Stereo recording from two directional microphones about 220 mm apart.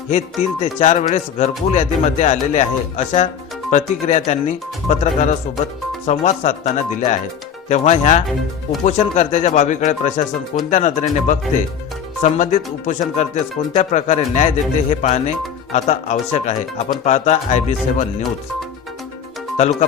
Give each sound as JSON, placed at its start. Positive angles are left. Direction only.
{"t": 0.6, "sound": "speech", "side_deg": 30}